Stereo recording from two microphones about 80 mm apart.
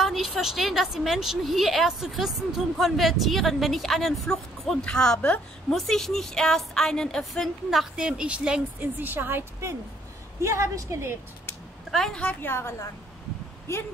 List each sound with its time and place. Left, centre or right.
0.0 s a woman's voice: centre
8.7 s a woman's voice: right
11.9 s a woman's voice: centre
12.4 s a woman's voice: left